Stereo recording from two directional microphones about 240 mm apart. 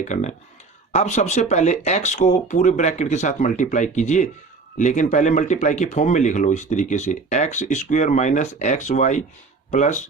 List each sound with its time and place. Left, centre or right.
0.0 s speech: left